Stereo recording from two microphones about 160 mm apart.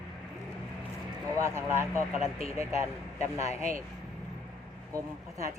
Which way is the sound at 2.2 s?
40° left (ahead or behind).